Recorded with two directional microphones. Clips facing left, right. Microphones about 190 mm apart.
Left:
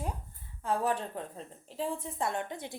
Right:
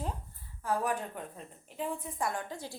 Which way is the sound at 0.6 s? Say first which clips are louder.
Left 1 dB; 25° left (ahead or behind).